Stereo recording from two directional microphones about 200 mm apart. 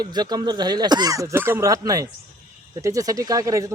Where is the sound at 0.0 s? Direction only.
20° right (ahead or behind).